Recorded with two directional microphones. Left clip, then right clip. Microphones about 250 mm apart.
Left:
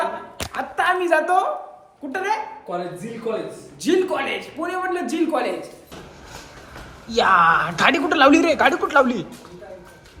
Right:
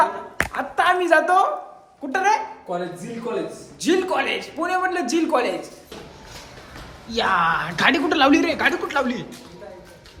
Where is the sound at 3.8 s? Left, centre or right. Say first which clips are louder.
Even; centre.